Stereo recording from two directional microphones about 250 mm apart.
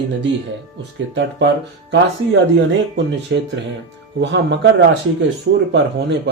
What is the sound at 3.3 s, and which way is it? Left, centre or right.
Speech, right.